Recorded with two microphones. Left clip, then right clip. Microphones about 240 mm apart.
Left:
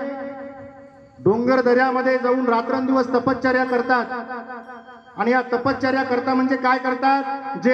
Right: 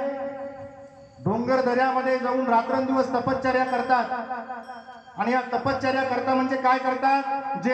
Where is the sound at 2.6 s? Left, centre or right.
Left.